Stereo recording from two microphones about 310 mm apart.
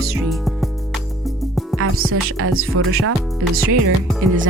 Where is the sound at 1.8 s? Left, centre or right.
Right.